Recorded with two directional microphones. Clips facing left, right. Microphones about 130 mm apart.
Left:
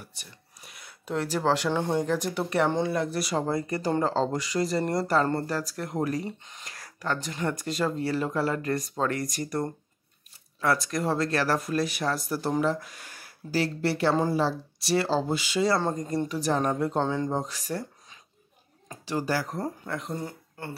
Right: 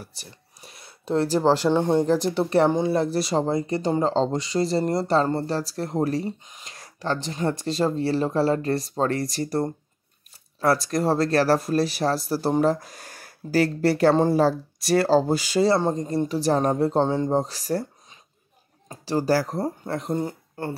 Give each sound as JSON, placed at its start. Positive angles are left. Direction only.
{"t": 0.0, "sound": "speech", "side_deg": -35}
{"t": 1.7, "sound": "speech", "side_deg": -20}
{"t": 2.0, "sound": "speech", "side_deg": -30}
{"t": 6.4, "sound": "speech", "side_deg": -15}
{"t": 15.7, "sound": "speech", "side_deg": -25}
{"t": 18.9, "sound": "speech", "side_deg": -35}